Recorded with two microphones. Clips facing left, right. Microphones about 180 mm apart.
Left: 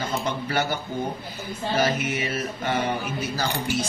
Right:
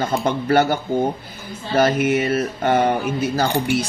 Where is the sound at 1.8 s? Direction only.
55° right (ahead or behind).